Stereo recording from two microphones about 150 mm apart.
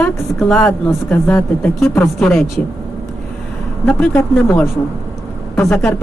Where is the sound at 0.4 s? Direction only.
15° left (ahead or behind).